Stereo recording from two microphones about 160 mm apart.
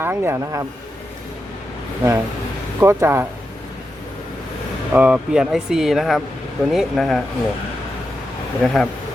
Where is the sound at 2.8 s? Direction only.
15° right (ahead or behind).